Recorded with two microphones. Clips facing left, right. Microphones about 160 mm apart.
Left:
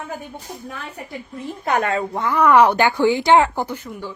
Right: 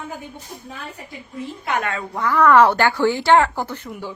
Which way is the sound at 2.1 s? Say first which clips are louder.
Right 1 dB; 20° left (ahead or behind).